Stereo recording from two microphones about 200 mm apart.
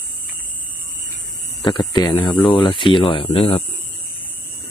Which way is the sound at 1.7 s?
20° left (ahead or behind).